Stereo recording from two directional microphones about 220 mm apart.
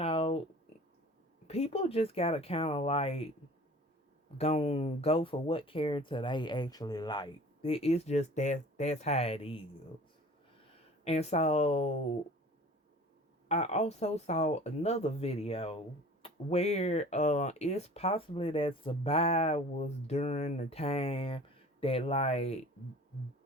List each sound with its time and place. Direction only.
0.0 s a sound: 25° left (ahead or behind)
1.5 s speech: 30° left (ahead or behind)
4.4 s speech: 30° left (ahead or behind)
11.0 s speech: 30° left (ahead or behind)
13.5 s speech: 30° left (ahead or behind)